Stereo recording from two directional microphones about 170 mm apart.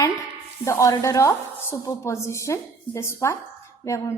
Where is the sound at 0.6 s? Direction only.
20° left (ahead or behind).